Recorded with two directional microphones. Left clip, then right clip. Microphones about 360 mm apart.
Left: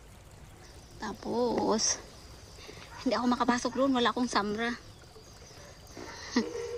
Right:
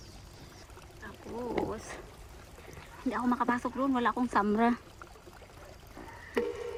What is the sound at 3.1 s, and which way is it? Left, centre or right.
Speech, centre.